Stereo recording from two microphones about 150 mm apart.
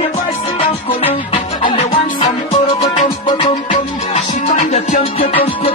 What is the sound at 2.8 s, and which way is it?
Music, 55° left (ahead or behind).